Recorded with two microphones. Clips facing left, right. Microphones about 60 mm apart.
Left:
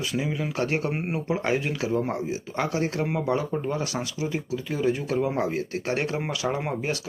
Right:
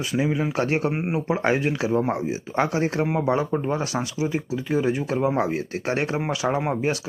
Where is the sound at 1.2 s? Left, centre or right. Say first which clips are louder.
Right 3 dB; right.